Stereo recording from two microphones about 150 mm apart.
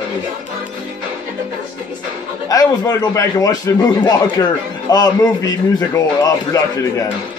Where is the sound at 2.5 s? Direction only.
25° left (ahead or behind).